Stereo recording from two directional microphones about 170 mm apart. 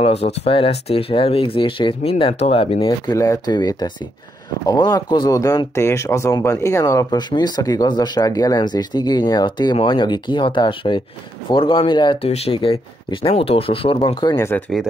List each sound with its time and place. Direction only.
0.0 s speech: 40° left (ahead or behind); by 14.6 s 20° left (ahead or behind)